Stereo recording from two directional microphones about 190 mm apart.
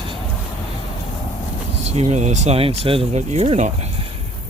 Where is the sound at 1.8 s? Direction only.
35° right (ahead or behind).